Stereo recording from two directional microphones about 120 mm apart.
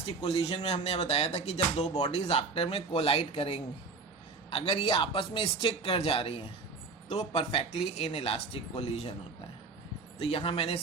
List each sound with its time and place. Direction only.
0.0 s a man's voice: 55° left (ahead or behind)
10.2 s a man's voice: 55° left (ahead or behind)